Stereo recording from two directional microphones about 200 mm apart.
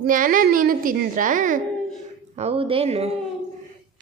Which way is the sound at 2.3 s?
30° right (ahead or behind).